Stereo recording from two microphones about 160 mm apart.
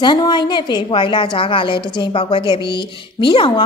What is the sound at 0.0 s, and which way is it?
A woman's voice, 30° left (ahead or behind).